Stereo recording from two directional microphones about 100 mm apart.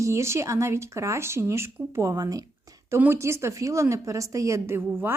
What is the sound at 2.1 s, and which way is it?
Speech, 40° right (ahead or behind).